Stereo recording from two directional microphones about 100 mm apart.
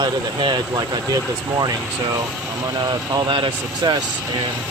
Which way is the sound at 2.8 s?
45° right (ahead or behind).